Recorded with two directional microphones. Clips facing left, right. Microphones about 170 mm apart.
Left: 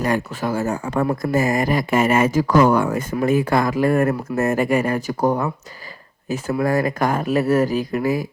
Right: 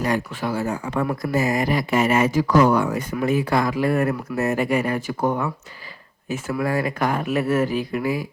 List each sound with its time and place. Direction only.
0.0 s speech: 45° left (ahead or behind)
6.6 s speech: 40° left (ahead or behind)